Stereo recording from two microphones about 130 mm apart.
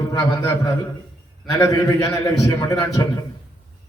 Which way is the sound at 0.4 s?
20° left (ahead or behind).